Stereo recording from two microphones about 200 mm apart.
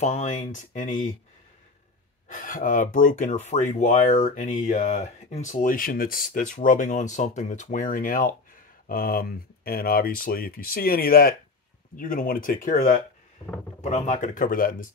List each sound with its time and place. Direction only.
0.0 s speech: 35° left (ahead or behind)
2.2 s speech: 40° left (ahead or behind)
13.4 s speech: 20° left (ahead or behind)
13.7 s speech: 35° left (ahead or behind)